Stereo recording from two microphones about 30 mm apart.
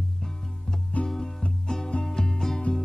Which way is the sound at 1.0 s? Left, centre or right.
Centre.